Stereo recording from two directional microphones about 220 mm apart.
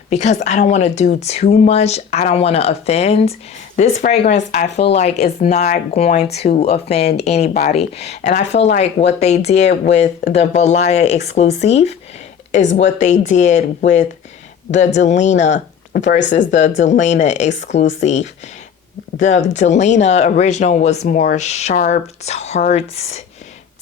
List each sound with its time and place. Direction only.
0.1 s speech: 30° left (ahead or behind)
16.0 s speech: 55° left (ahead or behind)
16.5 s speech: 35° left (ahead or behind)